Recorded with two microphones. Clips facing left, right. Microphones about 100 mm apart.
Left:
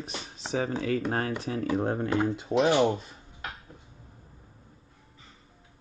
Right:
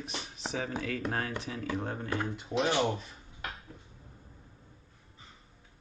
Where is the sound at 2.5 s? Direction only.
35° left (ahead or behind).